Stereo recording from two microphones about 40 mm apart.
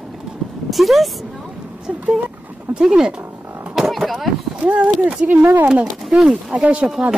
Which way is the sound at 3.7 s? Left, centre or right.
Centre.